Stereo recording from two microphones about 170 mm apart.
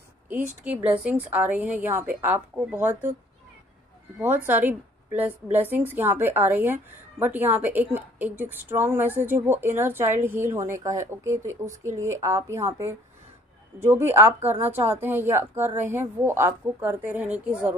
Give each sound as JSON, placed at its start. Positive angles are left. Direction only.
{"t": 0.9, "sound": "a woman's voice", "side_deg": -10}
{"t": 4.5, "sound": "a woman's voice", "side_deg": -10}